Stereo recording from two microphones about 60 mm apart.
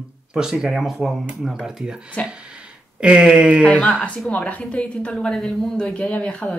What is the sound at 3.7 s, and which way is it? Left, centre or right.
A woman's voice, left.